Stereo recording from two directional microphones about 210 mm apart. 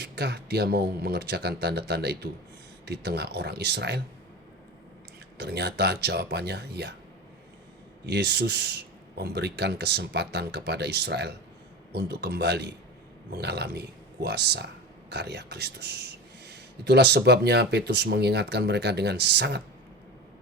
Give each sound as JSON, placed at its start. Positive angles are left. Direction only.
{"t": 0.0, "sound": "speech", "side_deg": -50}
{"t": 5.4, "sound": "speech", "side_deg": -50}
{"t": 8.0, "sound": "speech", "side_deg": -50}